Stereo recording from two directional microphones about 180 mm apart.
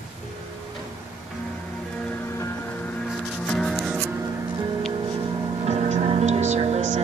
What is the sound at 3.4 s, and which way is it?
Music, 5° left (ahead or behind).